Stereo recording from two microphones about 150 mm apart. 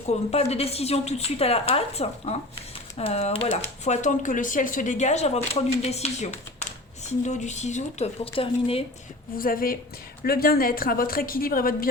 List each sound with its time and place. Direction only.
0.1 s speech: 45° left (ahead or behind)
9.4 s a woman's voice: 75° left (ahead or behind)
10.2 s a woman's voice: 85° left